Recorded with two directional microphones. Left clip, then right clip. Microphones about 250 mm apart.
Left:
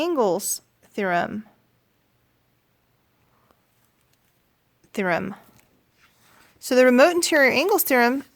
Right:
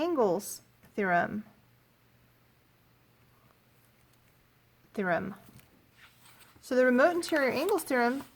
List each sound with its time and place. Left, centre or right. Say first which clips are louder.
0.0 s a woman's voice: left 6 dB; left
4.9 s speech: left 7 dB; left
6.6 s speech: left 9 dB; left